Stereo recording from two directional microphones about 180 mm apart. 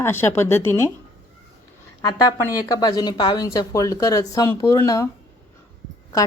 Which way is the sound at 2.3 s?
20° left (ahead or behind).